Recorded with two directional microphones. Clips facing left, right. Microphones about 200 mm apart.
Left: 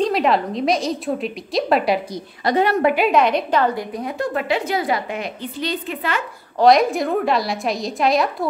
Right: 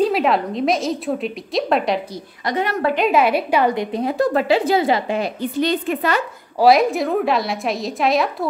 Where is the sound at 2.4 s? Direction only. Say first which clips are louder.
Left 4 dB; 30° left (ahead or behind).